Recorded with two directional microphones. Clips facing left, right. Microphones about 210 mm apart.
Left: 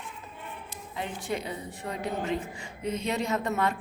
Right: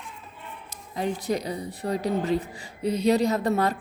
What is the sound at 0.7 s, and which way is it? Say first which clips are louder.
A woman's voice: right 8 dB; 40° right (ahead or behind).